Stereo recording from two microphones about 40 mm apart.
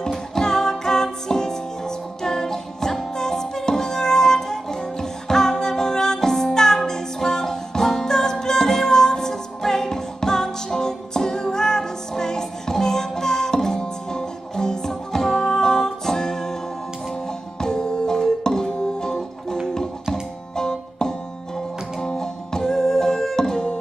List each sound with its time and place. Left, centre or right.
0.3 s music: centre
17.6 s music: centre
22.7 s music: centre